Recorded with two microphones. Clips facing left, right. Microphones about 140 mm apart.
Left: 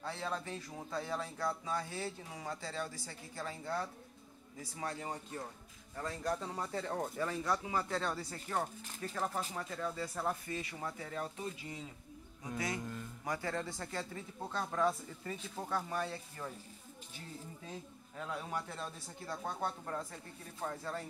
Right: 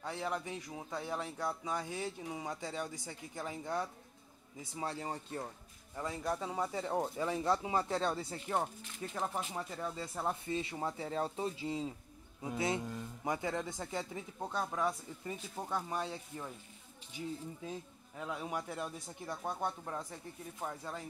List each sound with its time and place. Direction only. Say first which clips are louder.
0.0 s speech: right 2 dB; 15° right (ahead or behind)
6.0 s speech: right 1 dB; 5° right (ahead or behind)
18.1 s speech: right 1 dB; 15° right (ahead or behind)